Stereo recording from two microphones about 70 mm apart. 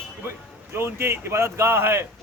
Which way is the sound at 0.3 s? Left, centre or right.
Right.